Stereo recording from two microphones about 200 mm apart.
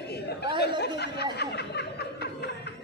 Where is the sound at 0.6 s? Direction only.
55° left (ahead or behind).